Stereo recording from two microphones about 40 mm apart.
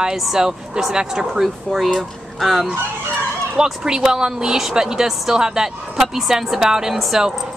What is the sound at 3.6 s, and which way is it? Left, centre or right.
Speech, centre.